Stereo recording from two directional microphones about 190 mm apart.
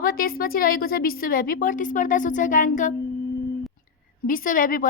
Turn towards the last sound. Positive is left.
turn(degrees=45)  # may be behind; listen again after turning